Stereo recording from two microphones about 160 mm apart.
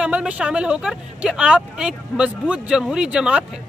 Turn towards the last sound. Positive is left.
turn(degrees=-5)  # may be behind; listen again after turning